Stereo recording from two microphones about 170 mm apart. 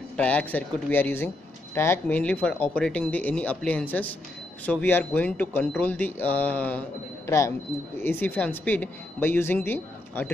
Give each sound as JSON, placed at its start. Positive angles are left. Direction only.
{"t": 0.2, "sound": "speech", "side_deg": 10}